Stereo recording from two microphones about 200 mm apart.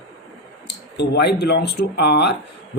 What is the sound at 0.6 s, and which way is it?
Speech, 55° left (ahead or behind).